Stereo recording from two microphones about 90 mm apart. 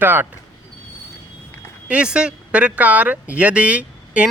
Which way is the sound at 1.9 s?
10° right (ahead or behind).